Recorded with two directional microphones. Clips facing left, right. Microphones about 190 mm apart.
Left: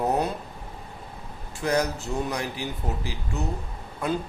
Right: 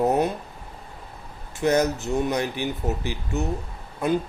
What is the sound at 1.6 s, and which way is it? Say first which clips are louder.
Speech: right 4 dB; 25° right (ahead or behind).